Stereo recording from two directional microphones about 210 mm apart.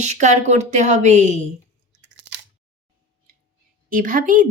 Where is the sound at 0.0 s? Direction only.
35° right (ahead or behind).